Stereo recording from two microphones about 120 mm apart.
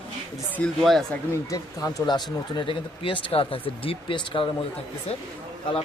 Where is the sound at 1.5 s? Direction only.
30° left (ahead or behind); by 4.4 s 50° left (ahead or behind).